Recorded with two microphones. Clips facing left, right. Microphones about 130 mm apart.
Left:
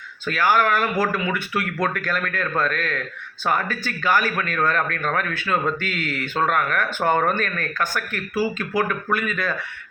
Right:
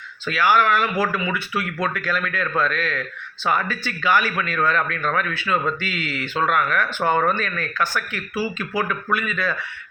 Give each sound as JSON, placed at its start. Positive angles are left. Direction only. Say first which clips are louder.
{"t": 0.3, "sound": "speech", "louder": "right 1 dB", "side_deg": 45}